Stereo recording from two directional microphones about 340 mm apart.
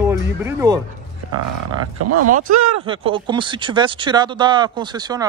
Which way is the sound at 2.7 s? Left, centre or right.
Centre.